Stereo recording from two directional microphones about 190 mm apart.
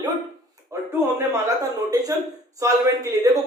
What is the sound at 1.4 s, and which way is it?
Speech, 20° right (ahead or behind).